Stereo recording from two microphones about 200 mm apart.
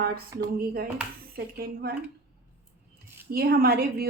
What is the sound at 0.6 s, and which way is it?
A woman's voice, 50° right (ahead or behind).